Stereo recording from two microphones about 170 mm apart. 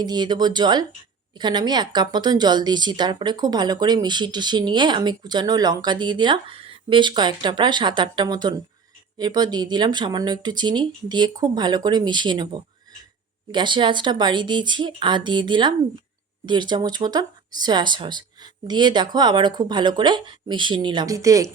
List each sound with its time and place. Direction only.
0.0 s a woman's voice: 25° right (ahead or behind)
13.5 s a woman's voice: 25° right (ahead or behind)